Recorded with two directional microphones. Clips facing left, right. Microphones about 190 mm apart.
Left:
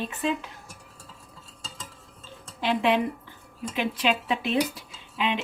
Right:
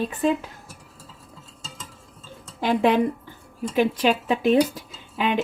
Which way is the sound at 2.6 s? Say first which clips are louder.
Right 4 dB; 45° right (ahead or behind).